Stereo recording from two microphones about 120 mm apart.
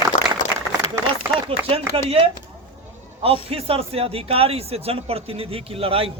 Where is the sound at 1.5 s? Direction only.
50° right (ahead or behind).